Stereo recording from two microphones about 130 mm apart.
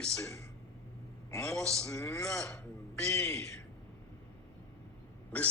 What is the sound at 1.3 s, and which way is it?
A man's voice, 25° left (ahead or behind).